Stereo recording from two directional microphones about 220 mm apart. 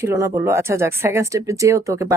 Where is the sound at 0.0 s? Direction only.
15° right (ahead or behind).